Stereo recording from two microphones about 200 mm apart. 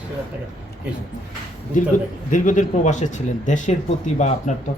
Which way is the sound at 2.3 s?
40° left (ahead or behind).